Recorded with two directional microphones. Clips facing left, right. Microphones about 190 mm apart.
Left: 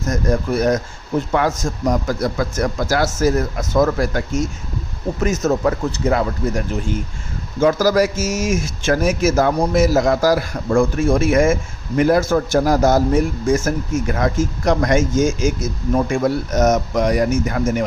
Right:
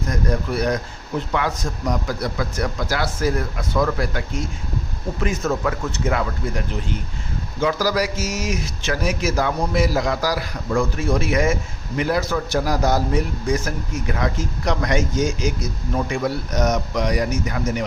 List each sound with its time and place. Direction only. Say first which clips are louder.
0.0 s a man's voice: left 4 dB; 45° left (ahead or behind)